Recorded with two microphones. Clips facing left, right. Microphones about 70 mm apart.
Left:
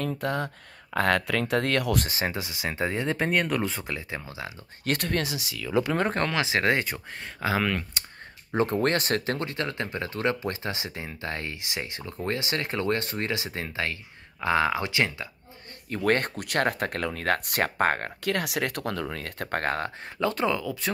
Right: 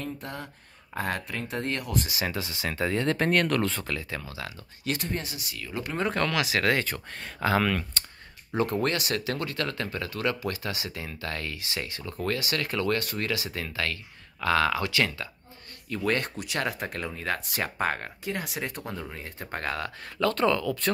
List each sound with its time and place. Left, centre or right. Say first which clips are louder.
0.2 s speech: left 9 dB; left
2.0 s speech: left 2 dB; left
2.3 s speech: even; left
3.1 s speech: right 2 dB; centre; by 4.6 s left
4.8 s speech: left 4 dB; left
6.1 s speech: left 1 dB; left
6.9 s speech: even; centre
8.5 s speech: left 2 dB; left
15.9 s speech: left 3 dB; left
18.2 s speech: left 6 dB; left
19.6 s speech: left 2 dB; left
20.0 s speech: right 1 dB; centre